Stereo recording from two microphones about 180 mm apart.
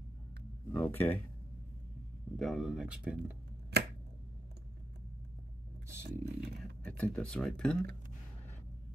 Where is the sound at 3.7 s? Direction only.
65° right (ahead or behind).